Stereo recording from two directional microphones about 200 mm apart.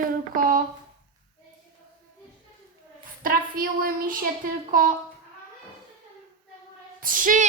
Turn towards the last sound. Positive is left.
turn(degrees=-40)  # may be behind; listen again after turning